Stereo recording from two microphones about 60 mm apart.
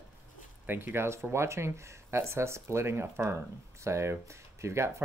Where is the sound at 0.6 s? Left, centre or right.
Right.